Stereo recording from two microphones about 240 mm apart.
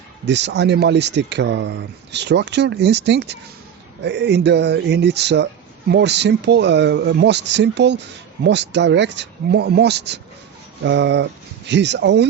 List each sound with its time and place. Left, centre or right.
0.3 s speech: right